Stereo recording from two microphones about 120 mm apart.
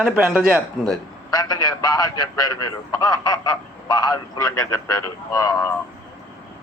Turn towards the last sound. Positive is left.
turn(degrees=30)  # may be behind; listen again after turning